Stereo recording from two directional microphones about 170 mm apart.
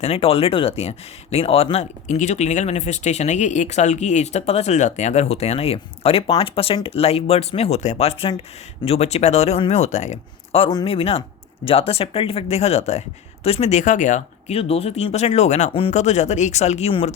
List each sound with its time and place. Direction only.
0.0 s speech: 35° left (ahead or behind)